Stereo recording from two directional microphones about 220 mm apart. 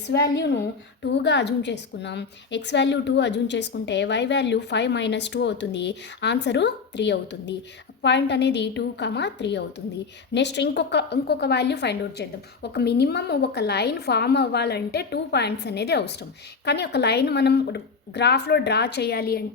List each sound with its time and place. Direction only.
0.1 s a woman's voice: 50° left (ahead or behind)